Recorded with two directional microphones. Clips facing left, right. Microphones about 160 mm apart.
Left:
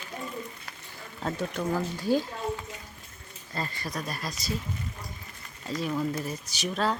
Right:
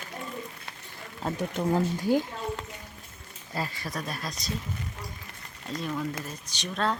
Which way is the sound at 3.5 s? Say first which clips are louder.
Right 1 dB; 5° right (ahead or behind).